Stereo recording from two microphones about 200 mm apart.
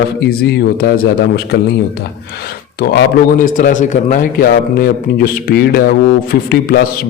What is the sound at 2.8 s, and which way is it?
A man's voice, 45° left (ahead or behind).